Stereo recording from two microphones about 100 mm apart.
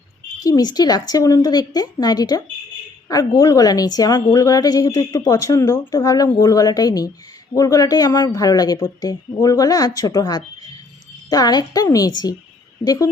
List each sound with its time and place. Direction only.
0.3 s a woman's voice: 35° left (ahead or behind)
5.9 s a woman's voice: 40° left (ahead or behind)